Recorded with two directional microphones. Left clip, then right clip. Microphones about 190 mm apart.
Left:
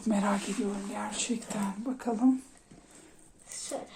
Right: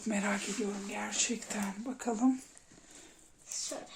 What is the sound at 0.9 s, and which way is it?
Speech, 15° right (ahead or behind).